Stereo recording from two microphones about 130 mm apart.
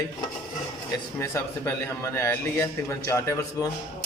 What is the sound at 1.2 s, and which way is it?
A man's voice, 20° left (ahead or behind).